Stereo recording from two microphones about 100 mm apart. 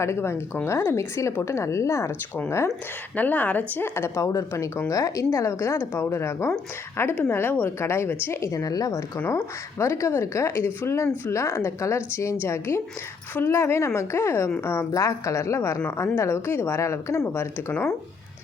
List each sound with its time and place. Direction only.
0.0 s a woman's voice: 25° left (ahead or behind)